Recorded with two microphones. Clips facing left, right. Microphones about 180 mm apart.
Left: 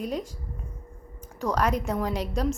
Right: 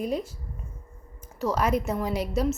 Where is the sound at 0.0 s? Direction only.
10° right (ahead or behind).